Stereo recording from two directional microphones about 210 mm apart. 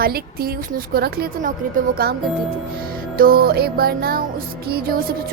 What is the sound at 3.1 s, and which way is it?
A woman's voice, 45° right (ahead or behind).